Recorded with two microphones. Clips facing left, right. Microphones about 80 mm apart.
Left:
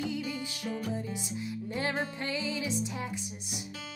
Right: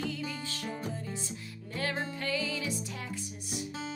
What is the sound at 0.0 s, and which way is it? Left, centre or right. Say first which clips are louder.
Music: left 2 dB; centre.